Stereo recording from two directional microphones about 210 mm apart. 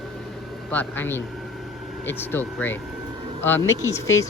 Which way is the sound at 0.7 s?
10° left (ahead or behind).